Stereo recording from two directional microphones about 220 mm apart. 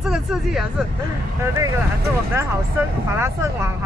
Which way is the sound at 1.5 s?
15° right (ahead or behind).